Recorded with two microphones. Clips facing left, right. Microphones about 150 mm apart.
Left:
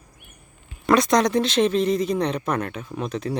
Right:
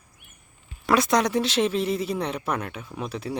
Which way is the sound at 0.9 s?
10° right (ahead or behind).